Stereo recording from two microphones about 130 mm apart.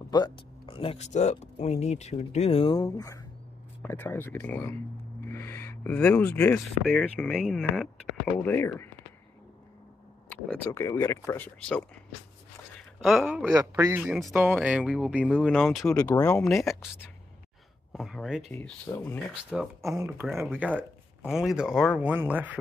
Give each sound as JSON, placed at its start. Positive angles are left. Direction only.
{"t": 0.7, "sound": "speech", "side_deg": 45}
{"t": 2.7, "sound": "speech", "side_deg": 25}
{"t": 3.8, "sound": "speech", "side_deg": 15}
{"t": 10.3, "sound": "speech", "side_deg": 15}
{"t": 11.4, "sound": "speech", "side_deg": 10}
{"t": 13.0, "sound": "speech", "side_deg": 0}
{"t": 13.4, "sound": "speech", "side_deg": -15}
{"t": 15.8, "sound": "speech", "side_deg": 25}
{"t": 16.4, "sound": "speech", "side_deg": 0}
{"t": 17.9, "sound": "speech", "side_deg": 0}
{"t": 18.5, "sound": "speech", "side_deg": 20}
{"t": 19.8, "sound": "speech", "side_deg": -25}
{"t": 22.0, "sound": "speech", "side_deg": -15}